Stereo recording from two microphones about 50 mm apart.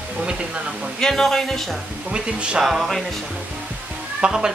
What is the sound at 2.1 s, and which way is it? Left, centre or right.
Speech, centre.